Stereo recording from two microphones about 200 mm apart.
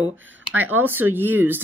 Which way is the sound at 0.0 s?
75° right (ahead or behind).